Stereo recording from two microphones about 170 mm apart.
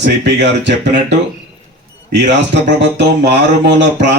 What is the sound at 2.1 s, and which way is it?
Speech, 90° right.